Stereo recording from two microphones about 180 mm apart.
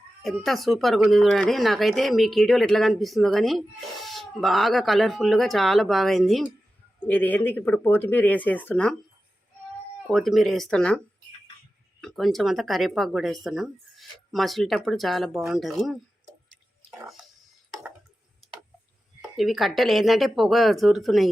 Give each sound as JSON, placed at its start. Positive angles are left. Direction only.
{"t": 0.2, "sound": "speech", "side_deg": 0}
{"t": 10.1, "sound": "speech", "side_deg": 0}
{"t": 17.0, "sound": "speech", "side_deg": -5}
{"t": 19.4, "sound": "speech", "side_deg": 0}